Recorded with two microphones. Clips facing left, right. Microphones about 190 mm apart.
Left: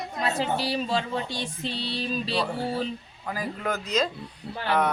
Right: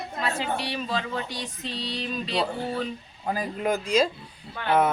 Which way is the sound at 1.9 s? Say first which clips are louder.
Left 1 dB; 30° left (ahead or behind).